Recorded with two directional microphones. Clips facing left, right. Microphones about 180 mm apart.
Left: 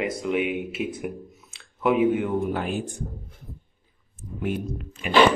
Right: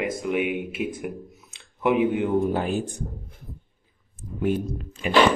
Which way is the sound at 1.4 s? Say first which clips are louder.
Even; 15° right (ahead or behind).